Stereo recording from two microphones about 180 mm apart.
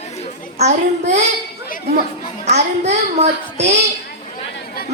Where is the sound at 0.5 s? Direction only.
40° right (ahead or behind).